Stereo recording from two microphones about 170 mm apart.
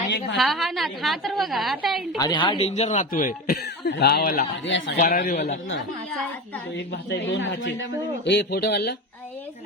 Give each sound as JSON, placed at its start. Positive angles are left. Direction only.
{"t": 0.3, "sound": "a woman's voice", "side_deg": 0}
{"t": 2.1, "sound": "speech", "side_deg": 25}
{"t": 4.9, "sound": "speech", "side_deg": 60}
{"t": 5.3, "sound": "speech", "side_deg": 45}
{"t": 7.3, "sound": "a man's voice", "side_deg": 90}